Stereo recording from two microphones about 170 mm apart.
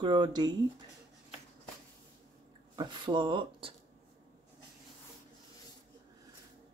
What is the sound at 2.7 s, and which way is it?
Speech, 25° right (ahead or behind).